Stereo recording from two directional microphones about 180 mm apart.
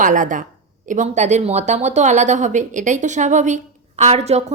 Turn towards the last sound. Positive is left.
turn(degrees=-35)  # may be behind; listen again after turning